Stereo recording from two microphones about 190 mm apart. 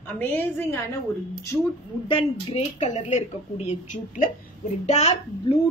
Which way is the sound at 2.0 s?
30° left (ahead or behind).